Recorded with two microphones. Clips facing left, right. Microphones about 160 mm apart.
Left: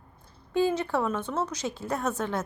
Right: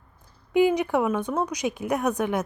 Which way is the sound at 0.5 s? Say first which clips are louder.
Right 5 dB; 15° right (ahead or behind).